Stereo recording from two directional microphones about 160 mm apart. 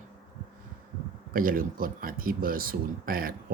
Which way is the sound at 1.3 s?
60° right (ahead or behind).